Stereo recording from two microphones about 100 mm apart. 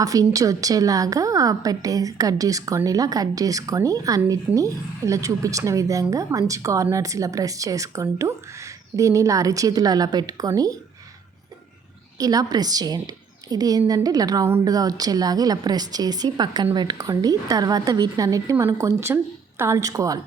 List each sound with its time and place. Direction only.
0.0 s a woman's voice: 35° right (ahead or behind)
12.1 s a woman's voice: 35° right (ahead or behind)